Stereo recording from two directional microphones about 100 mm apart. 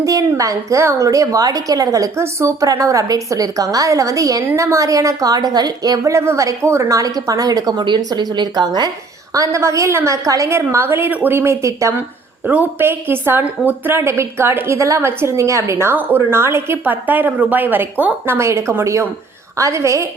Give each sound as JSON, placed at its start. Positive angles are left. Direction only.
{"t": 0.0, "sound": "speech", "side_deg": -35}
{"t": 9.3, "sound": "a woman's voice", "side_deg": -30}
{"t": 12.5, "sound": "a woman's voice", "side_deg": -20}